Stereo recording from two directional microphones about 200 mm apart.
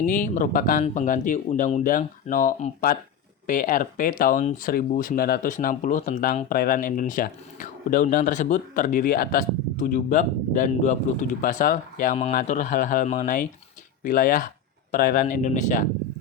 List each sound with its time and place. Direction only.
0.1 s speech: 40° left (ahead or behind)